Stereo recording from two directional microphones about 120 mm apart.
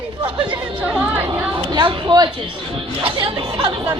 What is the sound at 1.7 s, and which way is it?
Speech, 40° right (ahead or behind).